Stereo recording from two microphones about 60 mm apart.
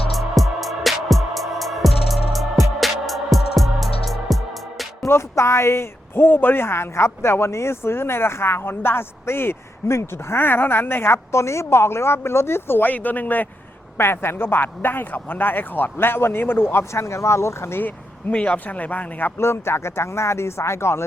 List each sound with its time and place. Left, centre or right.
0.1 s music: centre
5.0 s speech: left
14.0 s speech: left
17.8 s speech: left
19.4 s speech: left